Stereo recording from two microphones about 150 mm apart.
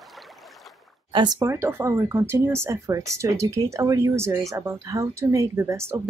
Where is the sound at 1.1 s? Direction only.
25° right (ahead or behind).